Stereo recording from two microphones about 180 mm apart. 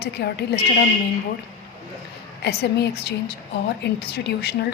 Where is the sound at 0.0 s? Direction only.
65° left (ahead or behind).